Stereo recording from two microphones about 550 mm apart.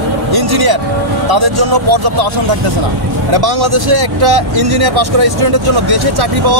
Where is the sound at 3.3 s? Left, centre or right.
Right.